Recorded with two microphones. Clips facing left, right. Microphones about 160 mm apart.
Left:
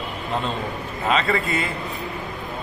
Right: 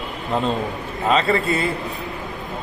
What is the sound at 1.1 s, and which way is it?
Speech, 35° right (ahead or behind).